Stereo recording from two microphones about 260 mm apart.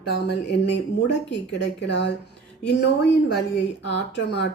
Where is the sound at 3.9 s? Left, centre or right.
Left.